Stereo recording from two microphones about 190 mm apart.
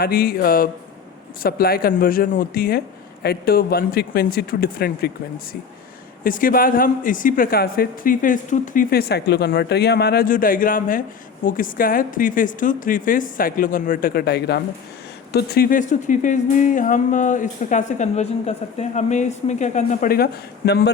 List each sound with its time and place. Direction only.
0.0 s speech: 50° left (ahead or behind)
6.2 s speech: 50° left (ahead or behind)